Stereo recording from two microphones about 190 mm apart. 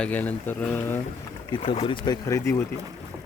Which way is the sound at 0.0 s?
10° left (ahead or behind).